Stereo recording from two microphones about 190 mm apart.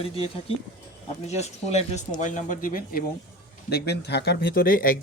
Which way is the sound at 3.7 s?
60° left (ahead or behind).